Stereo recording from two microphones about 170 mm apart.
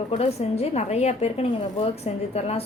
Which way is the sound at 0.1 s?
40° left (ahead or behind).